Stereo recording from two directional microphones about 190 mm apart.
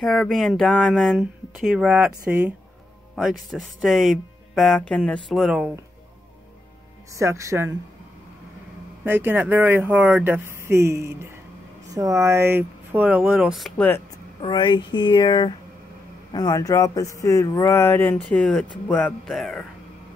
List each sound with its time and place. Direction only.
0.0 s speech: centre (ahead or behind)
7.1 s speech: 15° right (ahead or behind)
9.0 s speech: 10° right (ahead or behind); by 14.0 s 10° left (ahead or behind)
14.4 s speech: 25° left (ahead or behind); by 19.6 s centre (ahead or behind)